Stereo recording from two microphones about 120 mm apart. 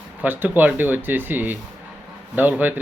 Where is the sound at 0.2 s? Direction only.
15° right (ahead or behind).